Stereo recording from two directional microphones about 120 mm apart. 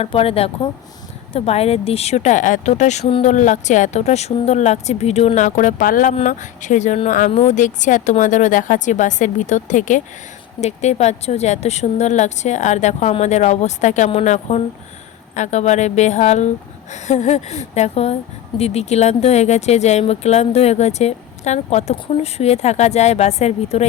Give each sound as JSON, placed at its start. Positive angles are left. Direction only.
{"t": 0.0, "sound": "speech", "side_deg": 50}
{"t": 3.1, "sound": "speech", "side_deg": 55}
{"t": 3.3, "sound": "a woman's voice", "side_deg": 85}
{"t": 10.6, "sound": "speech", "side_deg": 65}
{"t": 14.3, "sound": "speech", "side_deg": 75}